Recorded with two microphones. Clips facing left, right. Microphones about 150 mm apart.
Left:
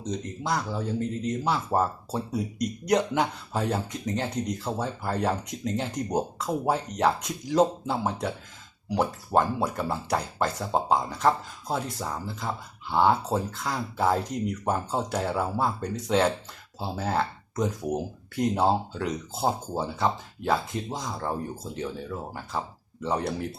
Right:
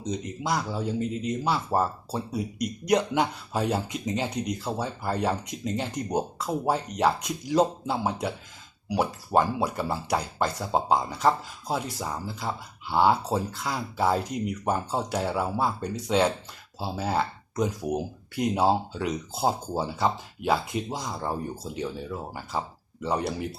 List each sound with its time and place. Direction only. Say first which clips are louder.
0.1 s speech: right 1 dB; 10° right (ahead or behind)